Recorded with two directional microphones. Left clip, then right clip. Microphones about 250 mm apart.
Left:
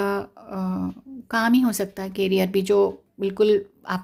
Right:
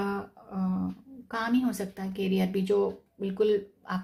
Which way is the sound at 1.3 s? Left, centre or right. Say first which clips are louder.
Left 8 dB; left.